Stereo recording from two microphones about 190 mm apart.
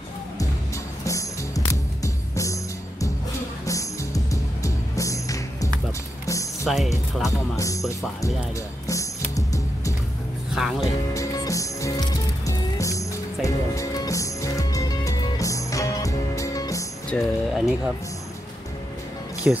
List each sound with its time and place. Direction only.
1.0 s music: 15° left (ahead or behind)
6.6 s speech: centre (ahead or behind)
7.2 s speech: 15° left (ahead or behind)
8.8 s music: 15° left (ahead or behind)
17.1 s speech: centre (ahead or behind)
19.4 s speech: 5° right (ahead or behind)